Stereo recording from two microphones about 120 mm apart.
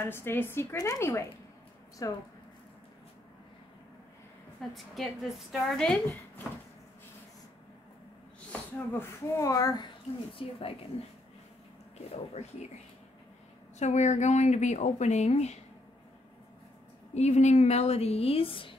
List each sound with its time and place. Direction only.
0.0 s a woman's voice: 20° left (ahead or behind)
4.6 s a woman's voice: centre (ahead or behind)
8.7 s a woman's voice: 20° left (ahead or behind)
10.3 s speech: 50° left (ahead or behind)
13.7 s speech: 70° left (ahead or behind)
17.1 s a woman's voice: 70° left (ahead or behind); by 18.8 s 45° left (ahead or behind)